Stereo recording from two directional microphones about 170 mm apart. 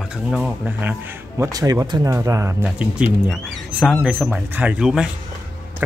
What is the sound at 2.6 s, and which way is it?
Speech, 5° right (ahead or behind).